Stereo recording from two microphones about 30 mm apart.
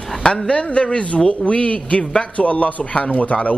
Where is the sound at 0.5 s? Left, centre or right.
Left.